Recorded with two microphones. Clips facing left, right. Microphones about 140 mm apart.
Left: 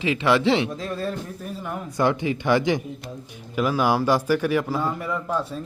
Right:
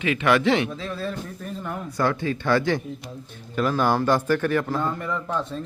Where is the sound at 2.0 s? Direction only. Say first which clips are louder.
Left 2 dB; 15° left (ahead or behind).